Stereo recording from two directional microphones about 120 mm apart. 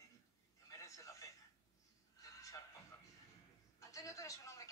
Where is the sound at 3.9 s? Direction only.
25° left (ahead or behind).